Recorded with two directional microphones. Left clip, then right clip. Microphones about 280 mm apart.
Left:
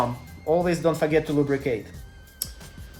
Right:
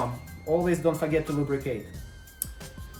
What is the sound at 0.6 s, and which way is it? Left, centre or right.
Speech, left.